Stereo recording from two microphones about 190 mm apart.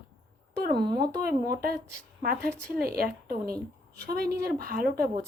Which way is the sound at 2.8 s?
50° right (ahead or behind).